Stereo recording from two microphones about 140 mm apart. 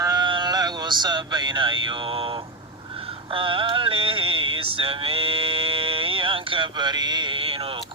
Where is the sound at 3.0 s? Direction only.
40° right (ahead or behind).